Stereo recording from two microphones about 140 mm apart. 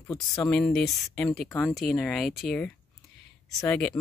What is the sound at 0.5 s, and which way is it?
Speech, 5° left (ahead or behind).